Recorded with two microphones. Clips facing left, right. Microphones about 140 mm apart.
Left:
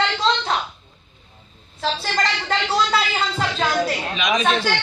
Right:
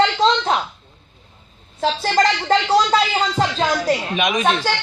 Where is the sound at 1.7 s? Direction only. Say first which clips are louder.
Right 5 dB; 45° right (ahead or behind).